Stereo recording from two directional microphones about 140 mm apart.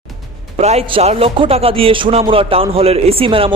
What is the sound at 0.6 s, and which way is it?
A man's voice, 50° right (ahead or behind).